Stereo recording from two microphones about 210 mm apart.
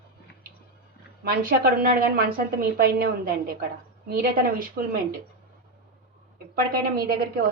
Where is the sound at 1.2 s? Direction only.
45° right (ahead or behind).